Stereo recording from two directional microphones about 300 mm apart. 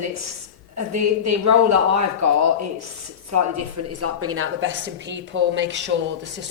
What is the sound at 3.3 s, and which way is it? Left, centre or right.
A woman's voice, right.